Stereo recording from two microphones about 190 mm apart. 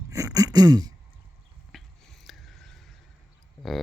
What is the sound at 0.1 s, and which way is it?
Throat clearing, 20° right (ahead or behind).